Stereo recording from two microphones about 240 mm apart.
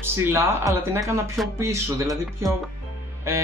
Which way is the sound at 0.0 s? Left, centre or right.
Centre.